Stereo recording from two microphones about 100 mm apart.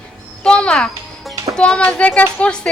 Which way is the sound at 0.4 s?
10° left (ahead or behind).